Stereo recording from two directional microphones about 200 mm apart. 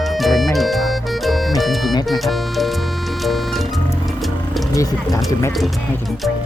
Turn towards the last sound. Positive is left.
turn(degrees=15)  # may be behind; listen again after turning